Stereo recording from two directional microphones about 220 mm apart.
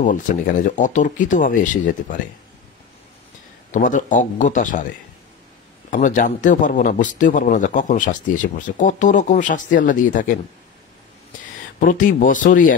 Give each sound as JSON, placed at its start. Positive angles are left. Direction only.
{"t": 0.0, "sound": "speech", "side_deg": 35}
{"t": 3.7, "sound": "speech", "side_deg": 35}
{"t": 5.9, "sound": "speech", "side_deg": 35}
{"t": 11.8, "sound": "speech", "side_deg": 35}